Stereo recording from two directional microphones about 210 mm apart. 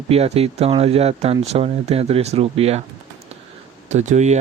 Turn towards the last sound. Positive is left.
turn(degrees=-35)  # may be behind; listen again after turning